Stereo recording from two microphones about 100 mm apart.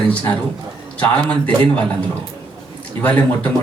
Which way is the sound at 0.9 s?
15° left (ahead or behind).